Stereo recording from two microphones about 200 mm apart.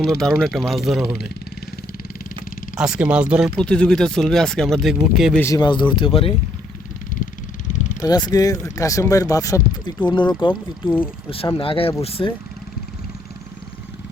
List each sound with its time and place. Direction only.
0.0 s speech: centre (ahead or behind)
2.7 s speech: 5° right (ahead or behind)
5.4 s speech: 15° left (ahead or behind)
7.7 s vehicle: 40° left (ahead or behind)
8.0 s speech: 20° left (ahead or behind)
10.8 s speech: 10° left (ahead or behind)
11.5 s speech: 25° left (ahead or behind)